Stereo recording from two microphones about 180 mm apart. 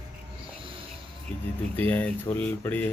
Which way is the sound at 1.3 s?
5° left (ahead or behind).